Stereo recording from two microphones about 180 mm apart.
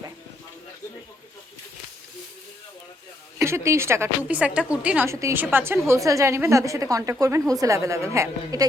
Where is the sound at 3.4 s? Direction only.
15° right (ahead or behind).